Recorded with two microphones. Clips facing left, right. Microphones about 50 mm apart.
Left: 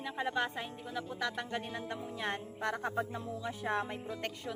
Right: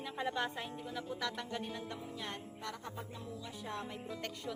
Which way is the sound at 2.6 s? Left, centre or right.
Left.